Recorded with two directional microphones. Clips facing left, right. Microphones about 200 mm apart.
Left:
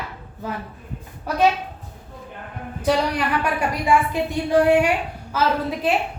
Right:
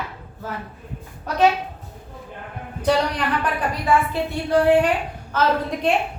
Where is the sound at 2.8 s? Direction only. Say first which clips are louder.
Even; 10° left (ahead or behind).